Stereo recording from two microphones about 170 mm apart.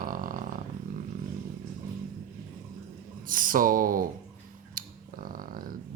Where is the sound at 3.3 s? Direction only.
55° right (ahead or behind).